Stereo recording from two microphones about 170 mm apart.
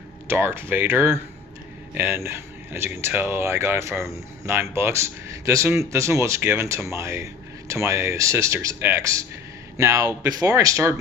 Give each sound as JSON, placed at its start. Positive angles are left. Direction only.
{"t": 0.3, "sound": "speech", "side_deg": -15}